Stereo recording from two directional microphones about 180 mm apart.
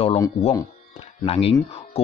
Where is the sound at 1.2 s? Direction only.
35° left (ahead or behind).